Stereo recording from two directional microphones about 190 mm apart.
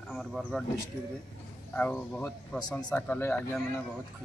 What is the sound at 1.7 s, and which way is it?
Speech, 10° left (ahead or behind).